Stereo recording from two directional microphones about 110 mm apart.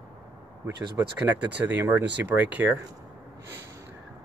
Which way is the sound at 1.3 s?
15° right (ahead or behind).